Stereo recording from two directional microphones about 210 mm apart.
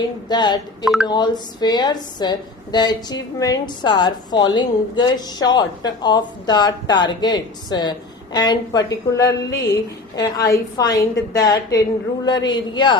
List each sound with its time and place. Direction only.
0.3 s a woman's voice: 20° left (ahead or behind)